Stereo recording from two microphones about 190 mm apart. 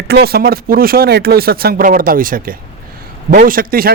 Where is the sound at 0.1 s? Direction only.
55° right (ahead or behind).